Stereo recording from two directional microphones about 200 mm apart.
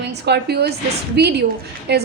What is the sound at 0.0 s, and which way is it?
A woman's voice, 55° right (ahead or behind).